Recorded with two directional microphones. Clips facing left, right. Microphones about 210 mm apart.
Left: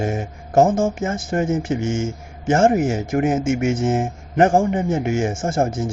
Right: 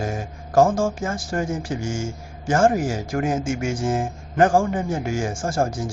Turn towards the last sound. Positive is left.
turn(degrees=25)  # may be behind; listen again after turning